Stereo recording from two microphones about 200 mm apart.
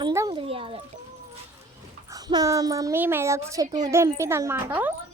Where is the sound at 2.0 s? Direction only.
20° right (ahead or behind).